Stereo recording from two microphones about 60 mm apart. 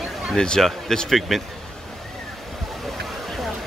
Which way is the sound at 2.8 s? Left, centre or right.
Centre.